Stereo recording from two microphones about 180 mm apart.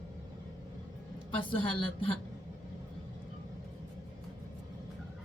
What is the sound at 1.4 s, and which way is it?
Speech, 30° left (ahead or behind).